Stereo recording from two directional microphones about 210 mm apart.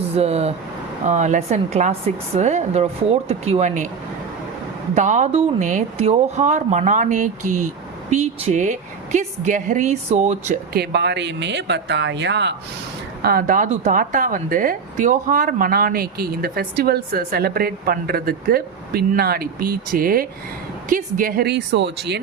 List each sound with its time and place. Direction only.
0.2 s speech: 30° right (ahead or behind)
4.9 s speech: 35° right (ahead or behind)
7.4 s speech: 90° right
8.1 s speech: 30° right (ahead or behind)
10.8 s speech: 55° right (ahead or behind)
13.2 s speech: 40° right (ahead or behind)